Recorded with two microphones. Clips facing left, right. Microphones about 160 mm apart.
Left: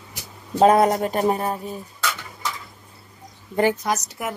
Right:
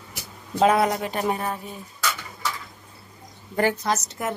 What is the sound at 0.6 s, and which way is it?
Speech, 40° left (ahead or behind).